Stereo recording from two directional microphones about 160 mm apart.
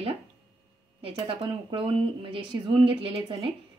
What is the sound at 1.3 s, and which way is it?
Speech, 35° right (ahead or behind).